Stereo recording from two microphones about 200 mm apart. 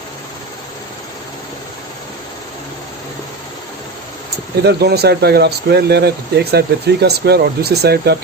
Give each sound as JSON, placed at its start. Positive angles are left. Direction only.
{"t": 4.6, "sound": "speech", "side_deg": -55}